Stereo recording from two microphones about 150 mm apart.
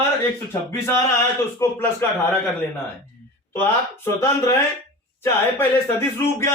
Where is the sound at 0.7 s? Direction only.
20° left (ahead or behind).